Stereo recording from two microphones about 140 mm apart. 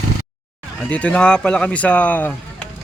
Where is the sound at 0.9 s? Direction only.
10° left (ahead or behind).